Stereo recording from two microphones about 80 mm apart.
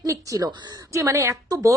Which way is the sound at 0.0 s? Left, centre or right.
Right.